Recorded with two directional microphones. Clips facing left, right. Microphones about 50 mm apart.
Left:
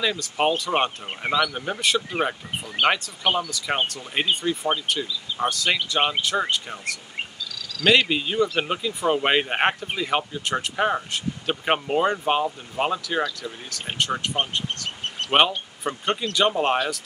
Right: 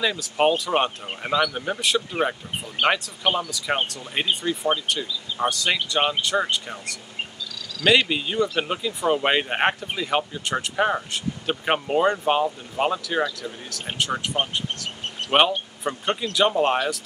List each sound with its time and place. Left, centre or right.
0.0 s speech: centre
7.8 s speech: centre